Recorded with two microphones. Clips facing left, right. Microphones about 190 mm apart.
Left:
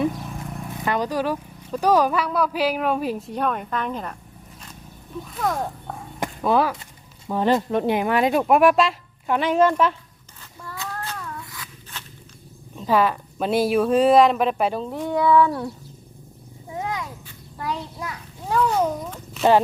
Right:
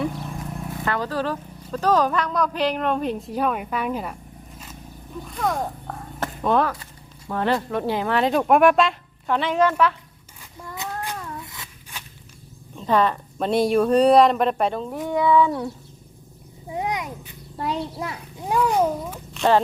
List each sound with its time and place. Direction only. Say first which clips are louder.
0.1 s vehicle: right 1 dB; centre (ahead or behind)
0.7 s speech: left 2 dB; 15° left (ahead or behind)
6.1 s a sound: left 1 dB; 10° left (ahead or behind)
7.3 s speech: left 3 dB; 15° left (ahead or behind)
10.6 s a sound: right 2 dB; 20° right (ahead or behind)
12.7 s speech: even; 5° left (ahead or behind)
14.8 s cat: left 1 dB; 5° right (ahead or behind)
15.4 s speech: left 1 dB; centre (ahead or behind)
16.7 s a sound: right 2 dB; 20° right (ahead or behind)
18.4 s cat: right 1 dB; 10° right (ahead or behind)